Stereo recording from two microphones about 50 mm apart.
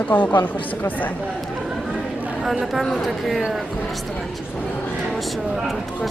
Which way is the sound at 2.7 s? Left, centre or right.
Centre.